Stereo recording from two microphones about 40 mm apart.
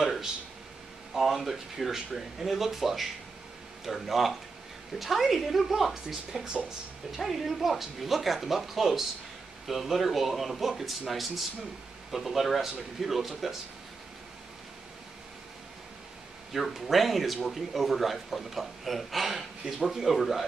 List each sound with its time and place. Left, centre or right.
1.1 s a man's voice: centre
16.5 s a man's voice: centre